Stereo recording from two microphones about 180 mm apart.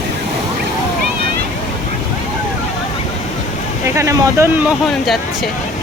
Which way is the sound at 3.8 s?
15° right (ahead or behind).